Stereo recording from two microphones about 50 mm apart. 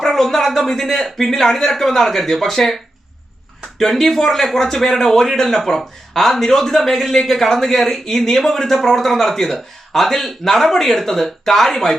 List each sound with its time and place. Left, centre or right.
0.0 s speech: centre
3.8 s speech: centre